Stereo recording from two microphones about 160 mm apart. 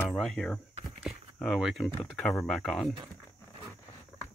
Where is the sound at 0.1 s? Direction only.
5° left (ahead or behind).